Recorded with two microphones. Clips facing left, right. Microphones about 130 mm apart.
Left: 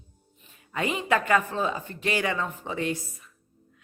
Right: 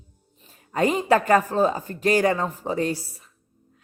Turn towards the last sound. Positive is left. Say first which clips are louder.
# right 4 dB
turn(degrees=-35)  # may be behind; listen again after turning